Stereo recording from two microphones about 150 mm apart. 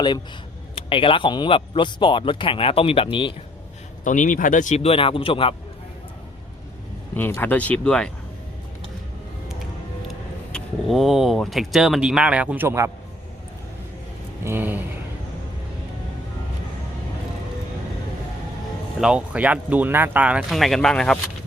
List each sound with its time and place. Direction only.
0.8 s speech: 35° left (ahead or behind)
4.0 s a man's voice: 60° left (ahead or behind); by 5.5 s 35° left (ahead or behind)
7.2 s speech: 15° left (ahead or behind)
10.1 s speech: centre (ahead or behind); by 12.9 s 20° right (ahead or behind)
14.4 s speech: 15° right (ahead or behind)
18.9 s speech: 5° right (ahead or behind)